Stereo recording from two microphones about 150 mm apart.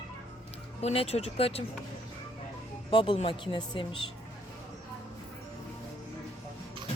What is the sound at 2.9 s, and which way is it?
Speech, 35° left (ahead or behind).